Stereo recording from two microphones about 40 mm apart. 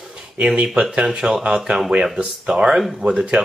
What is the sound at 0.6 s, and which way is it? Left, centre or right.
Speech, right.